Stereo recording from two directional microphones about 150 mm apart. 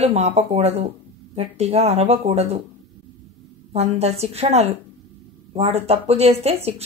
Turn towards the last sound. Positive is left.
turn(degrees=-45)  # may be behind; listen again after turning